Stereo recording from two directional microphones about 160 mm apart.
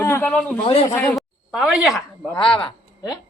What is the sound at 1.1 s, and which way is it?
Speech, centre (ahead or behind).